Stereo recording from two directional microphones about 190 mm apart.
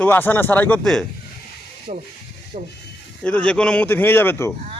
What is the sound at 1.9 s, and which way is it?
Speech, 40° right (ahead or behind).